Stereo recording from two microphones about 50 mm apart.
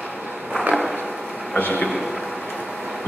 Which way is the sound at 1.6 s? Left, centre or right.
Left.